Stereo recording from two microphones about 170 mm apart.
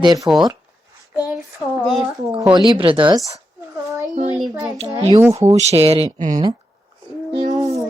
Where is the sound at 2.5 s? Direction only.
30° right (ahead or behind).